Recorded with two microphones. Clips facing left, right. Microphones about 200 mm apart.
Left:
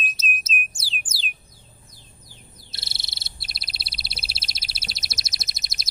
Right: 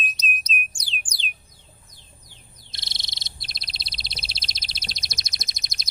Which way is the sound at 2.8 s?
5° left (ahead or behind).